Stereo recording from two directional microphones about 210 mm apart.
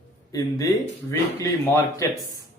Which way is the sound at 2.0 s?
15° left (ahead or behind).